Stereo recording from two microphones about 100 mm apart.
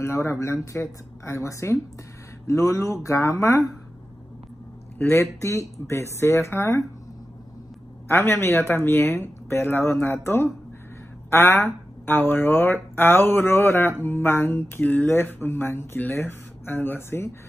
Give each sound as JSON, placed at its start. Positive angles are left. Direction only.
{"t": 0.0, "sound": "music", "side_deg": 30}
{"t": 2.4, "sound": "speech", "side_deg": 30}
{"t": 4.9, "sound": "music", "side_deg": 25}
{"t": 8.1, "sound": "music", "side_deg": 25}
{"t": 11.2, "sound": "speech", "side_deg": 25}
{"t": 12.9, "sound": "music", "side_deg": 20}